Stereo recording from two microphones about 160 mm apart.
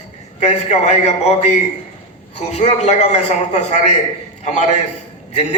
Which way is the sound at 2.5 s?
45° left (ahead or behind).